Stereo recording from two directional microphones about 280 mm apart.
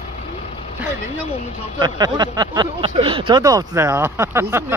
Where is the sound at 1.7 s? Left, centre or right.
Centre.